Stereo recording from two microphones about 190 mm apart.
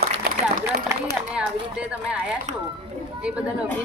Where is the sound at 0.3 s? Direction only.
55° right (ahead or behind).